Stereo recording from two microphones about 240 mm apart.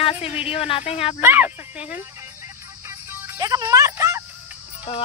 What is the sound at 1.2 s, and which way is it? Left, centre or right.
Speech, centre.